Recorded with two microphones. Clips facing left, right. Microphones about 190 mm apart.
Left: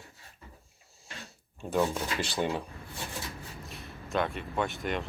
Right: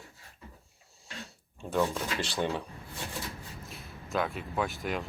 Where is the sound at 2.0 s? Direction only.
Centre (ahead or behind).